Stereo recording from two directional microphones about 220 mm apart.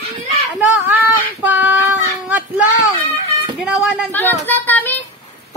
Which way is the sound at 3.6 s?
Centre (ahead or behind).